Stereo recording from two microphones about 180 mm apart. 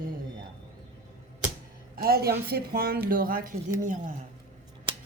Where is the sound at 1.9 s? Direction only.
60° right (ahead or behind).